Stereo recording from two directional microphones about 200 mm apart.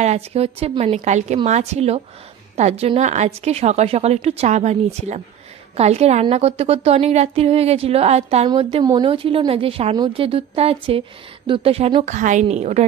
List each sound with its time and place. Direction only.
0.0 s a woman's voice: 30° right (ahead or behind)